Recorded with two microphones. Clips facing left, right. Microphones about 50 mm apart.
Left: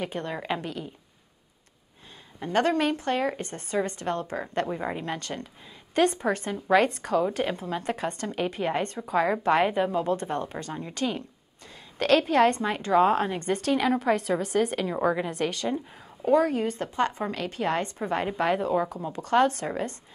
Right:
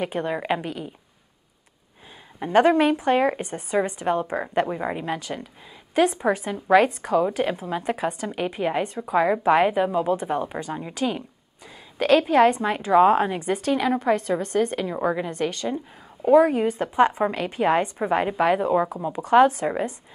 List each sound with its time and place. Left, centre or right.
0.0 s a woman's voice: centre
2.4 s a woman's voice: centre
16.3 s a woman's voice: centre